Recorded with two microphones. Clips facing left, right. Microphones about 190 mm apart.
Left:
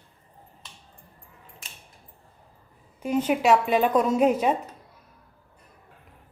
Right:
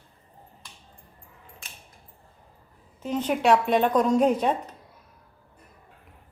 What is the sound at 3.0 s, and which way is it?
Speech, 10° left (ahead or behind).